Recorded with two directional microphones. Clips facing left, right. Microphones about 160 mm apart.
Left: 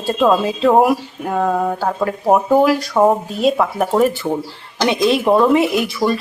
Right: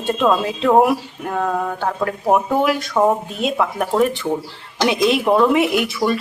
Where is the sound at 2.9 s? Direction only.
15° left (ahead or behind).